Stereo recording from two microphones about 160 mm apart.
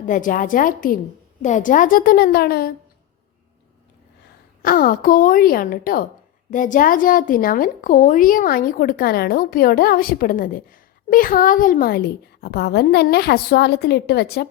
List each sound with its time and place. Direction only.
0.0 s a woman's voice: 55° left (ahead or behind); by 2.7 s 70° left (ahead or behind)
4.6 s a woman's voice: 65° left (ahead or behind); by 14.4 s 90° left